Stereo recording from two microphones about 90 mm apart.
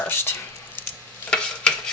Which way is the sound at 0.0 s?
25° left (ahead or behind).